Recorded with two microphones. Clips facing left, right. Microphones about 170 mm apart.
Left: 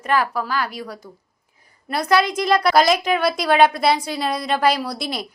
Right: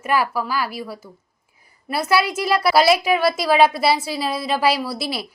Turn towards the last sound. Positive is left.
turn(degrees=-5)  # may be behind; listen again after turning